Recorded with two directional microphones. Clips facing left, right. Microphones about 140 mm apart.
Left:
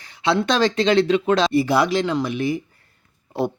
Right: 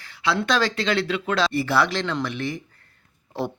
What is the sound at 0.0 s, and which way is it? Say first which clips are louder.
Speech: left 4 dB; 20° left (ahead or behind).